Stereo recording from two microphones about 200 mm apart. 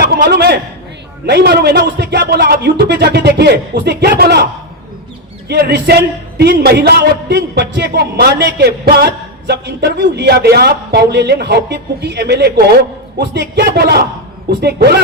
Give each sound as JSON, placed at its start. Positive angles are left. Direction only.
{"t": 0.0, "sound": "a man's voice", "side_deg": -55}
{"t": 5.5, "sound": "speech", "side_deg": -55}